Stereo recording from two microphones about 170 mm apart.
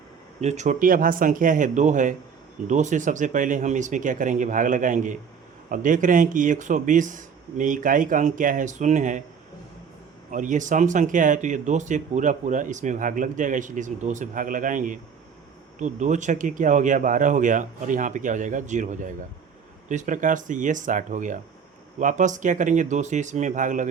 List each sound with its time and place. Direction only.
0.4 s speech: 45° right (ahead or behind)
10.3 s speech: 50° right (ahead or behind)